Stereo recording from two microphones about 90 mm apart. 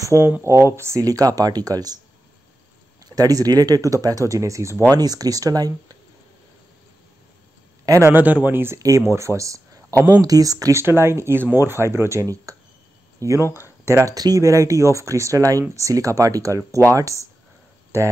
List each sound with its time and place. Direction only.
0.0 s speech: 30° right (ahead or behind)
3.2 s speech: 45° right (ahead or behind)
4.9 s speech: 45° right (ahead or behind)
7.8 s a man's voice: 40° right (ahead or behind)
8.1 s speech: 20° right (ahead or behind)
8.7 s speech: 40° right (ahead or behind)
10.8 s speech: 30° right (ahead or behind)
12.5 s a sound: 40° right (ahead or behind)
13.2 s speech: 35° right (ahead or behind)